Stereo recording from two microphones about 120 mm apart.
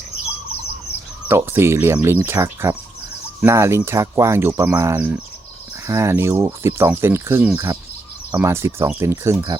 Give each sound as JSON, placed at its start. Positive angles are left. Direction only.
{"t": 1.3, "sound": "speech", "side_deg": -20}
{"t": 5.9, "sound": "speech", "side_deg": -25}